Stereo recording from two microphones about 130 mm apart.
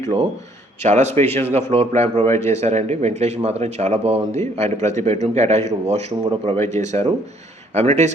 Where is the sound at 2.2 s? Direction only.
20° left (ahead or behind).